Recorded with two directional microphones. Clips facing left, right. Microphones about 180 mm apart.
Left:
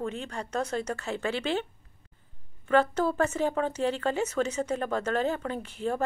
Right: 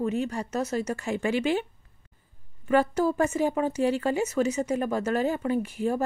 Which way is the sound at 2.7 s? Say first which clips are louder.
Right 2 dB; 10° right (ahead or behind).